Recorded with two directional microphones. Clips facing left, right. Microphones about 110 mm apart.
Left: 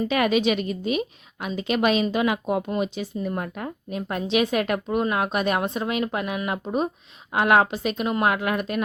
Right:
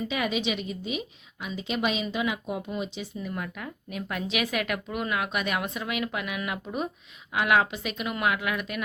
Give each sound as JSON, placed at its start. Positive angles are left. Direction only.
{"t": 0.1, "sound": "a woman's voice", "side_deg": 60}